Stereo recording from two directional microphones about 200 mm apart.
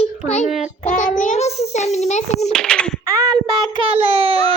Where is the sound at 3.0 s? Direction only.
20° right (ahead or behind).